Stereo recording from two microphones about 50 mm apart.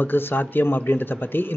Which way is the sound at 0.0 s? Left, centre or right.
Left.